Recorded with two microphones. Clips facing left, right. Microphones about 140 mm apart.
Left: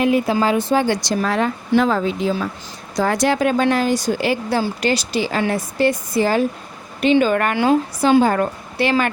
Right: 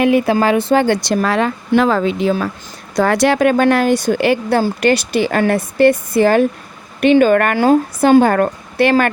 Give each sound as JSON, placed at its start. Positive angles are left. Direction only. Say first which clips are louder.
{"t": 0.0, "sound": "a woman's voice", "louder": "right 4 dB", "side_deg": -70}